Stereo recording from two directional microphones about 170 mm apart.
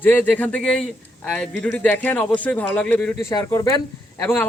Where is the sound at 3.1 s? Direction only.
20° left (ahead or behind).